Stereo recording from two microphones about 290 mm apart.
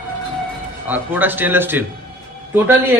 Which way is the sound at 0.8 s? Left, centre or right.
Centre.